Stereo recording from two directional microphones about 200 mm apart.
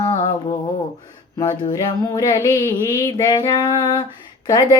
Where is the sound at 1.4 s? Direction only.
15° left (ahead or behind).